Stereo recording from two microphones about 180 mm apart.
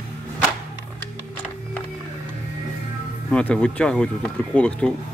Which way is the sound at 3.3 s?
5° left (ahead or behind).